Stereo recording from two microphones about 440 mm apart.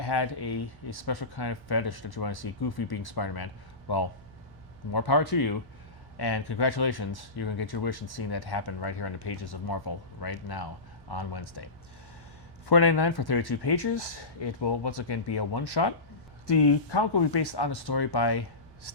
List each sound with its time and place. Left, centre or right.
0.0 s speech: left
6.1 s speech: left